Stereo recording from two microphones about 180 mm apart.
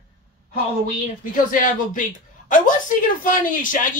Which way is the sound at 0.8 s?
45° left (ahead or behind).